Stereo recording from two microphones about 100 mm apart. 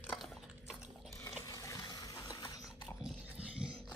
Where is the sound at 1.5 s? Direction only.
35° left (ahead or behind).